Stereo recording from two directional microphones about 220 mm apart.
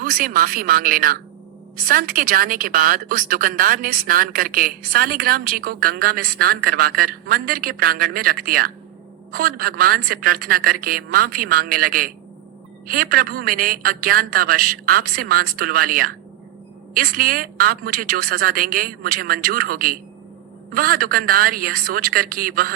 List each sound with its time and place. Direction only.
0.0 s a woman's voice: 40° right (ahead or behind)